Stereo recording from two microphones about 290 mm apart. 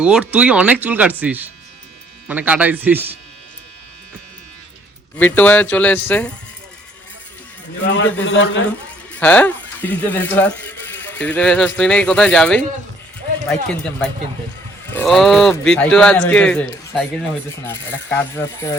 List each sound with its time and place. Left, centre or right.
0.0 s speech: centre
5.1 s speech: centre
7.9 s a man's voice: left
9.1 s speech: centre